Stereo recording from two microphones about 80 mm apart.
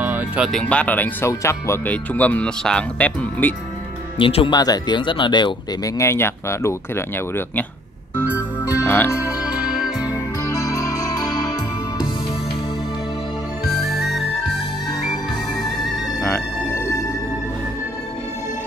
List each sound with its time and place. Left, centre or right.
0.7 s speech: centre
1.2 s speech: left
1.9 s speech: centre
4.2 s speech: left
5.9 s speech: left
8.8 s speech: left
9.5 s music: centre
10.4 s music: left
13.8 s music: centre